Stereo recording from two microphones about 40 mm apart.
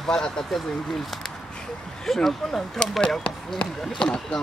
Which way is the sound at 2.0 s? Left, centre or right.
Centre.